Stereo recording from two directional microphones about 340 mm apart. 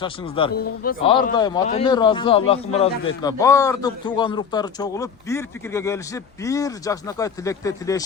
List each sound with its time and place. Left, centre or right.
0.0 s a man's voice: centre